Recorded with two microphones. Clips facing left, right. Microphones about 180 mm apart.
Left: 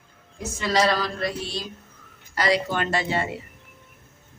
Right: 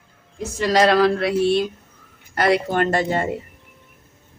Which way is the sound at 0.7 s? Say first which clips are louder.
Right 7 dB; 55° right (ahead or behind).